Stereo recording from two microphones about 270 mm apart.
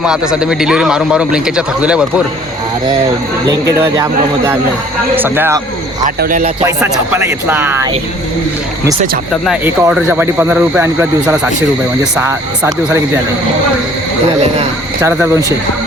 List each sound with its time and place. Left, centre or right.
0.0 s a man's voice: centre
3.8 s speech: centre
6.1 s speech: right
7.1 s speech: centre
9.3 s a man's voice: centre
15.0 s speech: centre